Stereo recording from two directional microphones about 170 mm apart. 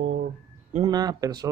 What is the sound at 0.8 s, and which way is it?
Speech, 20° right (ahead or behind).